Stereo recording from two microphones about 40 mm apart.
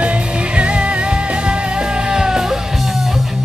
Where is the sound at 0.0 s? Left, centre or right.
Right.